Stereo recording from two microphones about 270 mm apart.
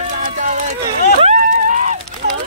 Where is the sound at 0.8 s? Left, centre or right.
Right.